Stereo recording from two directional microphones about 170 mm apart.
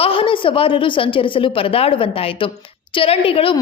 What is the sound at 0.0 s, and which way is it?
A woman's voice, 35° left (ahead or behind).